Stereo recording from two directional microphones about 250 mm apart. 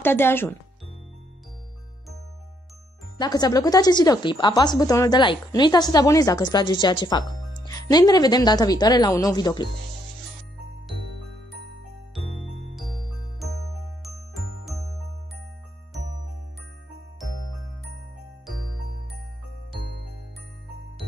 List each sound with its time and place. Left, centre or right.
0.0 s speech: centre
3.2 s speech: centre
14.3 s music: centre